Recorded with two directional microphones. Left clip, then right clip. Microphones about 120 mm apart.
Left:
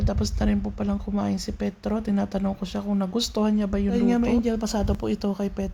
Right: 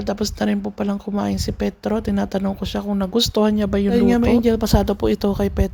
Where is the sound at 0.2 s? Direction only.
40° right (ahead or behind).